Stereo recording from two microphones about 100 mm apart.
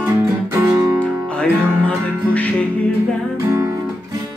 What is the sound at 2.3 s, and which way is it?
Music, 15° left (ahead or behind).